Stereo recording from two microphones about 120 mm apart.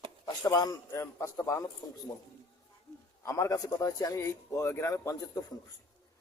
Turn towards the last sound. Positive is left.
turn(degrees=25)  # may be behind; listen again after turning